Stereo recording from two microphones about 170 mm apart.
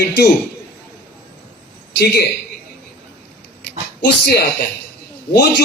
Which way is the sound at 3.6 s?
70° left (ahead or behind).